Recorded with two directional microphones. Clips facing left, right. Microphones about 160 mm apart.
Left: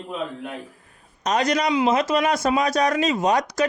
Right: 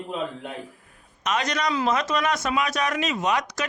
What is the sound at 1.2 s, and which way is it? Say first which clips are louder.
A man's voice: left 4 dB; 35° left (ahead or behind).